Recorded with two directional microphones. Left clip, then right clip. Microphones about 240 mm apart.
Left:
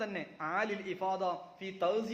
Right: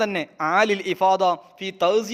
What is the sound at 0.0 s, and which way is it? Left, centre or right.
A man's voice, right.